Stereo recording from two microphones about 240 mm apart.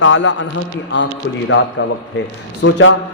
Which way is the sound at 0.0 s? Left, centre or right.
Left.